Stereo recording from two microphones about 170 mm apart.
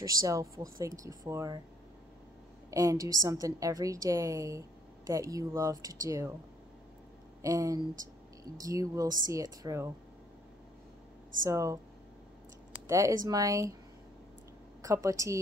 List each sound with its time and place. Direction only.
0.0 s a woman's voice: 20° right (ahead or behind)
2.7 s a woman's voice: 20° right (ahead or behind)
7.4 s a woman's voice: 20° right (ahead or behind)
11.4 s a woman's voice: 20° right (ahead or behind)
12.8 s speech: 15° right (ahead or behind)
14.8 s a woman's voice: 20° right (ahead or behind)